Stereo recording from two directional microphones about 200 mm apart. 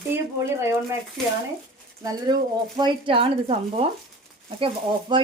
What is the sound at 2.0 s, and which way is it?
Speech, 20° right (ahead or behind).